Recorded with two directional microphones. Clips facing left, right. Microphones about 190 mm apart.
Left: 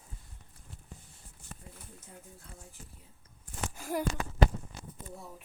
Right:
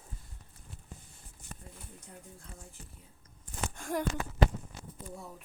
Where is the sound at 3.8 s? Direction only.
5° left (ahead or behind).